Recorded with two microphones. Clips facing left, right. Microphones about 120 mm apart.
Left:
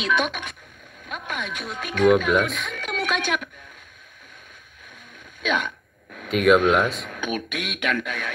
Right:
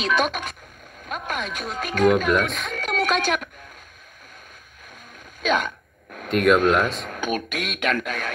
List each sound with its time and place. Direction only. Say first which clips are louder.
0.0 s speech: right 2 dB; 35° right (ahead or behind)
2.2 s speech: even; centre (ahead or behind)
2.5 s speech: right 3 dB; 35° right (ahead or behind)
5.4 s speech: right 3 dB; 35° right (ahead or behind)
6.3 s speech: even; centre (ahead or behind)
6.9 s speech: right 2 dB; 35° right (ahead or behind)